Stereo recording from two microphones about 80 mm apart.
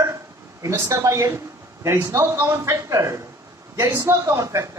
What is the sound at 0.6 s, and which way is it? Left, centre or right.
A woman's voice, right.